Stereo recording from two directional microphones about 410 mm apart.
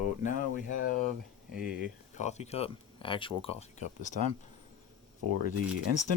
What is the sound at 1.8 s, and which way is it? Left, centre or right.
Speech, centre.